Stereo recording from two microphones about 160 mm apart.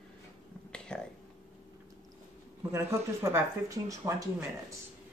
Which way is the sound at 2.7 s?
20° right (ahead or behind).